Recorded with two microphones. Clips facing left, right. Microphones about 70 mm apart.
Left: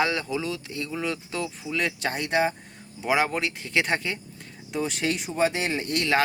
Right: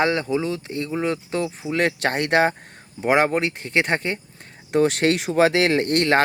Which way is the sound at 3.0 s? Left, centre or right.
Right.